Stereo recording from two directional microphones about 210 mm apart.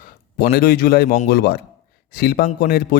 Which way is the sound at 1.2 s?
50° left (ahead or behind).